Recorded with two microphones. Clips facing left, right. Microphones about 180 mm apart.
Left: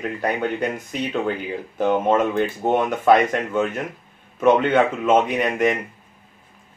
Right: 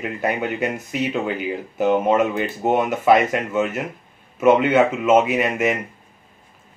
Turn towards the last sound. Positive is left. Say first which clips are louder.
# even
turn(degrees=-5)  # may be behind; listen again after turning